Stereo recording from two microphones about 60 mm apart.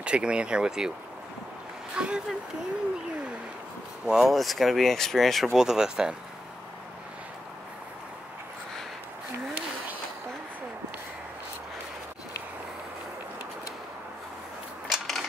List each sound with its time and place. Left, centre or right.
0.0 s speech: centre
2.0 s speech: centre
4.0 s speech: centre
4.3 s speech: centre
5.5 s speech: centre
14.9 s a sound: centre